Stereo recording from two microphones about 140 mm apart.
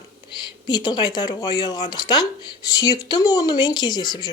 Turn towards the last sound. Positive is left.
turn(degrees=30)  # may be behind; listen again after turning